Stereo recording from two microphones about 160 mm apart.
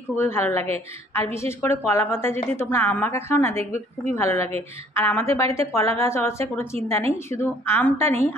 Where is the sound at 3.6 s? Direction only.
45° right (ahead or behind).